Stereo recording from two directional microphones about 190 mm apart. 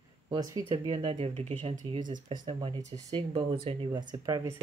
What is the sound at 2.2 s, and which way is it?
Speech, 25° right (ahead or behind).